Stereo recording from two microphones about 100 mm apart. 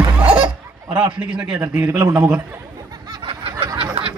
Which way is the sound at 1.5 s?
30° right (ahead or behind).